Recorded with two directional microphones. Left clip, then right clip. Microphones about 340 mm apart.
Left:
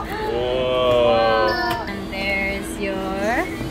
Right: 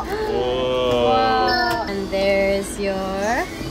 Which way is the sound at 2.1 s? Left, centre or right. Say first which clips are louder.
Right 5 dB; right.